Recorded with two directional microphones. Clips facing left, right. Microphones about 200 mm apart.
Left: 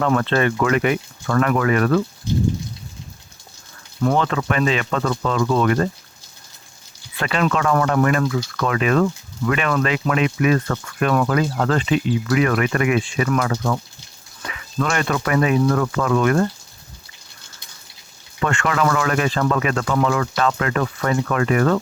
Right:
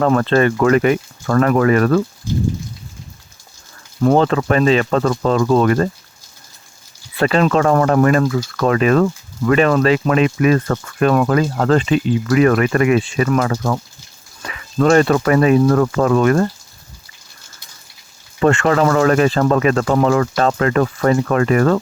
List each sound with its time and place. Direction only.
0.0 s speech: 40° right (ahead or behind)
4.0 s speech: 35° right (ahead or behind)
7.2 s speech: 35° right (ahead or behind)
18.3 s speech: 35° right (ahead or behind)